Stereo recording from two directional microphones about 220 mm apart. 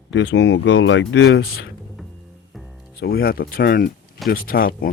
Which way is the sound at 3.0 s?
45° left (ahead or behind).